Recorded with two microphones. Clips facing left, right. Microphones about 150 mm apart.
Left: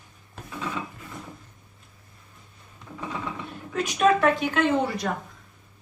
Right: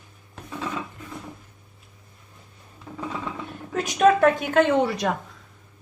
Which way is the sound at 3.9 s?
45° right (ahead or behind).